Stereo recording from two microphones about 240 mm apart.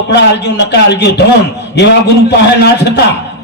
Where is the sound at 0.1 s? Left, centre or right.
Left.